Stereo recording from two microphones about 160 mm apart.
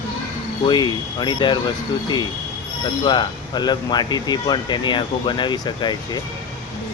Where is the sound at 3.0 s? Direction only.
30° left (ahead or behind).